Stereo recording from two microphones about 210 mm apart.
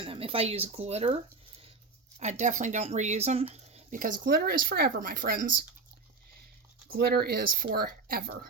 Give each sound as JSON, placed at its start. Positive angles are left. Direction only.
{"t": 0.0, "sound": "speech", "side_deg": -25}
{"t": 3.5, "sound": "a sound", "side_deg": -30}
{"t": 4.2, "sound": "speech", "side_deg": -50}
{"t": 6.8, "sound": "speech", "side_deg": -50}